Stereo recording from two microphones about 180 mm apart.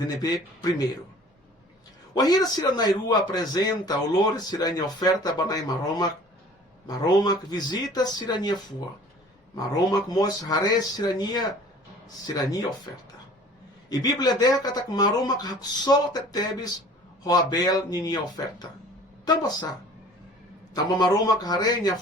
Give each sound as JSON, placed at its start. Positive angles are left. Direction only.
{"t": 2.1, "sound": "speech", "side_deg": 20}
{"t": 9.7, "sound": "speech", "side_deg": 20}
{"t": 13.9, "sound": "speech", "side_deg": 20}
{"t": 20.7, "sound": "speech", "side_deg": 20}